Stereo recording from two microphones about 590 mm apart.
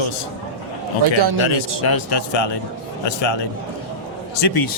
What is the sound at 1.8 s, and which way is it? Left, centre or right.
Speech, left.